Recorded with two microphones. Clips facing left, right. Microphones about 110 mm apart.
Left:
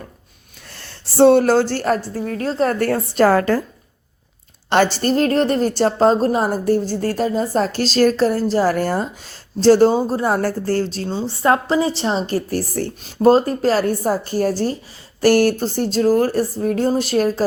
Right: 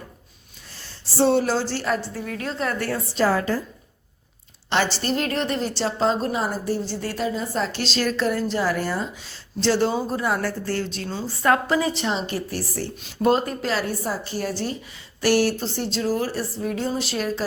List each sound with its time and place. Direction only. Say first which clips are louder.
0.7 s a woman's voice: left 1 dB; 65° left (ahead or behind)
4.7 s a woman's voice: left 7 dB; 50° left (ahead or behind)